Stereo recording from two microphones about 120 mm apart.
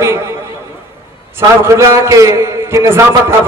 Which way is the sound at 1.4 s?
25° right (ahead or behind).